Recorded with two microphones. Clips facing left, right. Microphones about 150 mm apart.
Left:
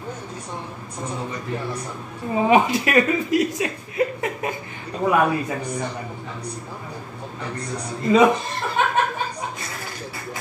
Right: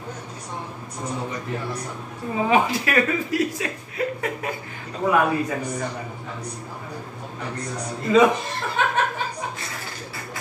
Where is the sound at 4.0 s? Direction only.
20° left (ahead or behind).